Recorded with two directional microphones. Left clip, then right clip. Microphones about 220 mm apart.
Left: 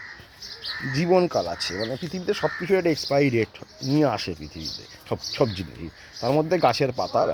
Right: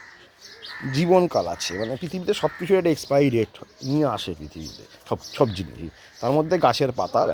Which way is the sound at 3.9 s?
5° right (ahead or behind).